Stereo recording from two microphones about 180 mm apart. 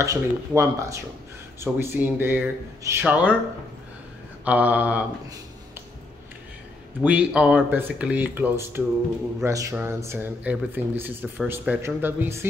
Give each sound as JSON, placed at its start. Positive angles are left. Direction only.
{"t": 0.0, "sound": "speech", "side_deg": -15}
{"t": 4.5, "sound": "speech", "side_deg": -10}
{"t": 7.0, "sound": "speech", "side_deg": -5}